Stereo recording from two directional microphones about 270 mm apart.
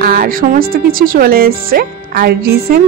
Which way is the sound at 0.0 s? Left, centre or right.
Right.